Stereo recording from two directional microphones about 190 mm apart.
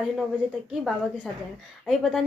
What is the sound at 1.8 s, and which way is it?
Speech, centre (ahead or behind).